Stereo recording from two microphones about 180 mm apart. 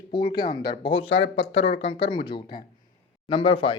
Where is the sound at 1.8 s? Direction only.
30° left (ahead or behind).